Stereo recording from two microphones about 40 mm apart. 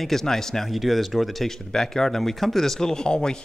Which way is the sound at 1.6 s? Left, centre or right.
Centre.